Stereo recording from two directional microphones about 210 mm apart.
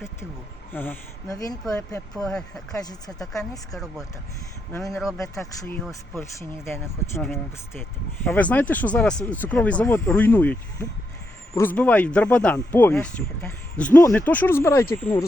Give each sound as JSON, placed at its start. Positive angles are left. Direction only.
{"t": 0.7, "sound": "speech", "side_deg": 10}
{"t": 2.1, "sound": "speech", "side_deg": 5}
{"t": 3.3, "sound": "speech", "side_deg": 15}
{"t": 4.9, "sound": "speech", "side_deg": 0}
{"t": 5.9, "sound": "speech", "side_deg": 10}